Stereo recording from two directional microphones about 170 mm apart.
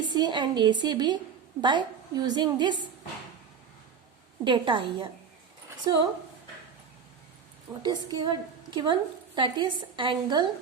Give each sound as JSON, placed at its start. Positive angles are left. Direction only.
{"t": 0.0, "sound": "a woman's voice", "side_deg": -25}
{"t": 4.4, "sound": "a woman's voice", "side_deg": -30}
{"t": 7.8, "sound": "a woman's voice", "side_deg": -25}